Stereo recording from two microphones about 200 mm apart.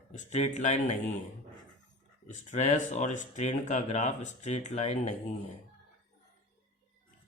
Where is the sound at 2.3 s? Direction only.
35° left (ahead or behind).